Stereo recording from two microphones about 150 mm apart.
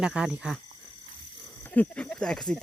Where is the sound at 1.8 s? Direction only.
5° left (ahead or behind).